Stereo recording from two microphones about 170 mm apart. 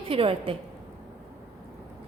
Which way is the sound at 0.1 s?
35° right (ahead or behind).